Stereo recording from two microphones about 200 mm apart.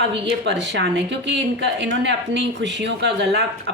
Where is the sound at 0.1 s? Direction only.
65° right (ahead or behind).